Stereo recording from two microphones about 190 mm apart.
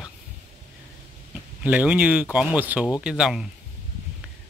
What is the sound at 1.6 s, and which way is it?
Speech, 5° right (ahead or behind).